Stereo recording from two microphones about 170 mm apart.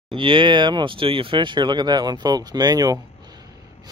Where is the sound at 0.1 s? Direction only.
30° right (ahead or behind).